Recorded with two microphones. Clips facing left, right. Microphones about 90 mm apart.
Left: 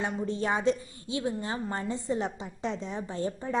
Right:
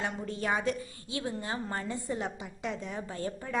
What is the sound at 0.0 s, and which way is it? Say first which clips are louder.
A woman's voice: left 4 dB; 25° left (ahead or behind).